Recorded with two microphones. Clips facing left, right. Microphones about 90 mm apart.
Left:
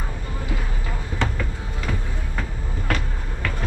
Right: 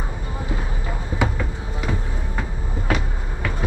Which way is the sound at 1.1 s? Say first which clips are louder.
Right 3 dB; 10° right (ahead or behind).